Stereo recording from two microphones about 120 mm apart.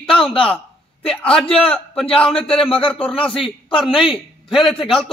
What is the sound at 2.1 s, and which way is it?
Speech, 5° left (ahead or behind).